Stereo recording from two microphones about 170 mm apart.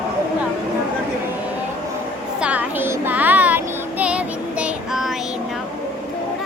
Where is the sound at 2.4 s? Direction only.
10° right (ahead or behind).